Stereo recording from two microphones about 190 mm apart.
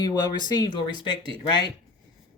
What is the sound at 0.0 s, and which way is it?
Speech, 20° left (ahead or behind).